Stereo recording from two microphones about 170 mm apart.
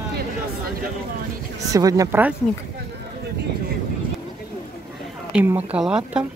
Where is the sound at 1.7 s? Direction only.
20° right (ahead or behind).